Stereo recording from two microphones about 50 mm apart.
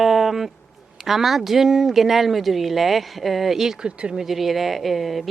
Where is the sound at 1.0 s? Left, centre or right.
Centre.